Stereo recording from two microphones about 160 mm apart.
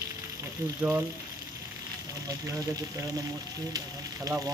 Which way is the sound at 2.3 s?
20° right (ahead or behind).